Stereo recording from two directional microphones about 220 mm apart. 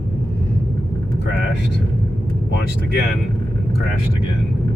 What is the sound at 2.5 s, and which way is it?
Speech, 50° left (ahead or behind).